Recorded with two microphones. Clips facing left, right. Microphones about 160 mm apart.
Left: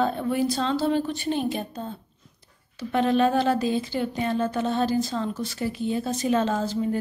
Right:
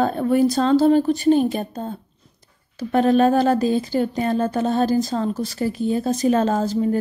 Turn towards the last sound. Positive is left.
turn(degrees=-40)  # may be behind; listen again after turning